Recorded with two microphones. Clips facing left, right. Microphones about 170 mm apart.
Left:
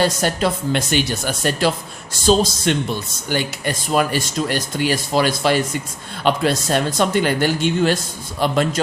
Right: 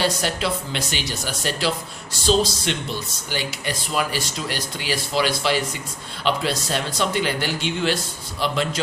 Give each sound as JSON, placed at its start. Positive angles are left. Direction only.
{"t": 0.0, "sound": "speech", "side_deg": 45}